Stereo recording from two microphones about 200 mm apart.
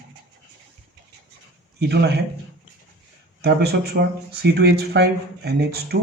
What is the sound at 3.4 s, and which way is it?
Speech, 55° right (ahead or behind).